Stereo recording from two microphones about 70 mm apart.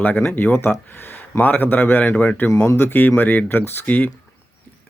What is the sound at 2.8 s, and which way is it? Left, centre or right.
Speech, left.